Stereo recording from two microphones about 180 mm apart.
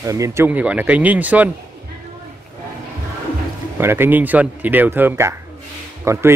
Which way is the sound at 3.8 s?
15° right (ahead or behind).